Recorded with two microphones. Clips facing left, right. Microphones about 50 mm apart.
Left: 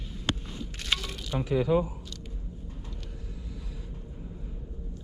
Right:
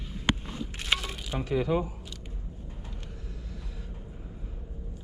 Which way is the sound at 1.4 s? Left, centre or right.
Centre.